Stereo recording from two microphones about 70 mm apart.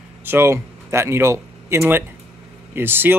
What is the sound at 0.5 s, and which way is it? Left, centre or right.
Speech, right.